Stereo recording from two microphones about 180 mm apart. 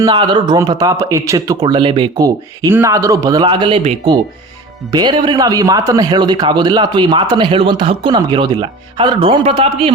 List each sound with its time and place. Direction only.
0.0 s speech: 25° right (ahead or behind)